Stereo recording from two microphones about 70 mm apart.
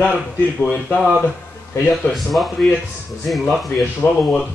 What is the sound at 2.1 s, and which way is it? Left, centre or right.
A man's voice, centre.